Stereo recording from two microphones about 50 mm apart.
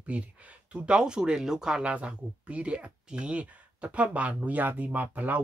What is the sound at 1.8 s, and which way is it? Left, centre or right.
Speech, right.